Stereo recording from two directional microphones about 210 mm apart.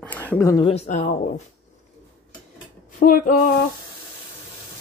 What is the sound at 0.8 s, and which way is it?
Speech, 35° left (ahead or behind).